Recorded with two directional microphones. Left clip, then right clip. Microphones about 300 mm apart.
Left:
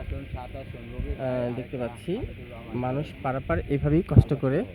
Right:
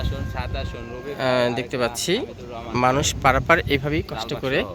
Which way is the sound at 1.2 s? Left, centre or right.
Centre.